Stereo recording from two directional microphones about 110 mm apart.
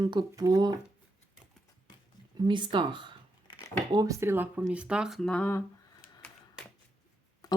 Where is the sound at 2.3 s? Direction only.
45° right (ahead or behind).